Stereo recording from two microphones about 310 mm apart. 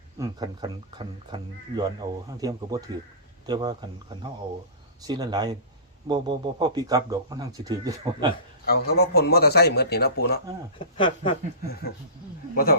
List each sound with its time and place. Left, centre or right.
0.2 s speech: centre
8.6 s speech: left
10.8 s speech: centre